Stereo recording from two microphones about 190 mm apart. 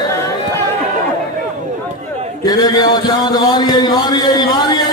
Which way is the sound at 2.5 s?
20° left (ahead or behind).